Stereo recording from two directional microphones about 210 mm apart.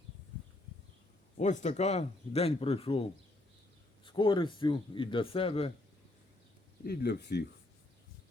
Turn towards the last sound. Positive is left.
turn(degrees=55)  # may be behind; listen again after turning